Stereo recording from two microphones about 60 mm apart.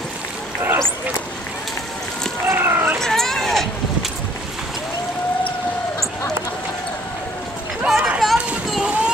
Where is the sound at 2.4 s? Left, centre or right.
Right.